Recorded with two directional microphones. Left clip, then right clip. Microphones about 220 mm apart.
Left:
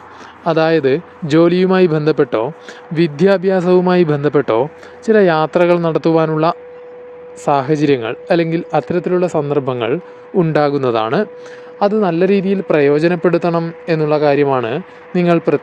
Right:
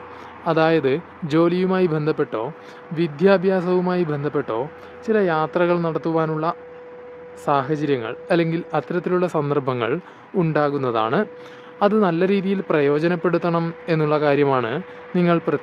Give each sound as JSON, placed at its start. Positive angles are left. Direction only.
{"t": 0.4, "sound": "a man's voice", "side_deg": 20}